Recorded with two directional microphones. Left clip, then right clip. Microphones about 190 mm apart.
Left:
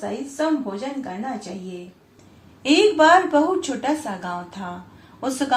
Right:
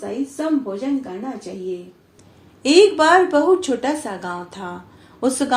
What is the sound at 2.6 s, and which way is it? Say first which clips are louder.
Speech: right 2 dB; 40° right (ahead or behind).